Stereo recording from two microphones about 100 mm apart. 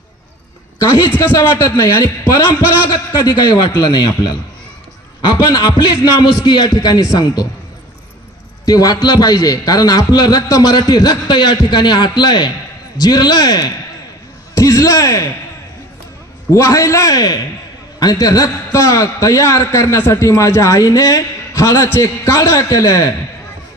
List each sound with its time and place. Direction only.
0.7 s a woman's voice: 30° left (ahead or behind)
1.6 s a man's voice: 30° left (ahead or behind)
3.1 s a man's voice: 45° left (ahead or behind)
8.6 s a man's voice: 40° left (ahead or behind)
16.5 s a man's voice: 30° left (ahead or behind)